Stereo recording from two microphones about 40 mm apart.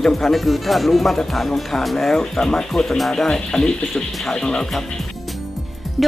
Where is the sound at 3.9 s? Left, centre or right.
Centre.